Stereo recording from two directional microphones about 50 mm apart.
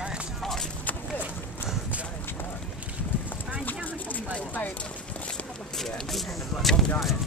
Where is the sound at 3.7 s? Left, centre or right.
Left.